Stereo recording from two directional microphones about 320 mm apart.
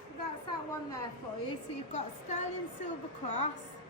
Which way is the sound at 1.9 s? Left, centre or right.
Left.